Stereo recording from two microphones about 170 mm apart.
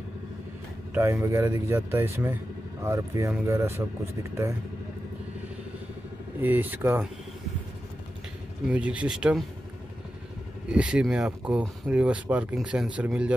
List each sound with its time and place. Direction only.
0.9 s speech: 15° right (ahead or behind)
6.4 s speech: 10° right (ahead or behind)
8.6 s speech: 10° right (ahead or behind)
10.7 s speech: 5° right (ahead or behind)